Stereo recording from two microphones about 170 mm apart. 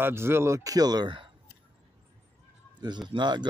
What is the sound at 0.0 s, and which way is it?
Speech, 15° right (ahead or behind).